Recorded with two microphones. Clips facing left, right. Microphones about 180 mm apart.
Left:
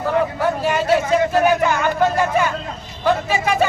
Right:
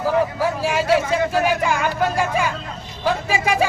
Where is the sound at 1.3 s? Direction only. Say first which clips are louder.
Left 3 dB; 5° right (ahead or behind).